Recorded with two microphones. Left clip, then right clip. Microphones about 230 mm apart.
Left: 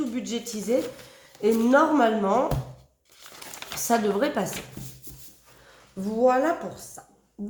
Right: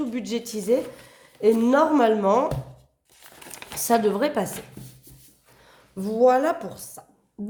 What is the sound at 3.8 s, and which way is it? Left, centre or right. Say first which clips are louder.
Speech: right 3 dB; right.